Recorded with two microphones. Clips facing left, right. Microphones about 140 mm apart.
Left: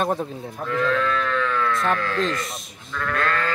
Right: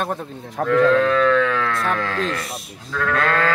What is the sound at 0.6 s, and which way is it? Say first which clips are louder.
Livestock: right 8 dB; 70° right (ahead or behind).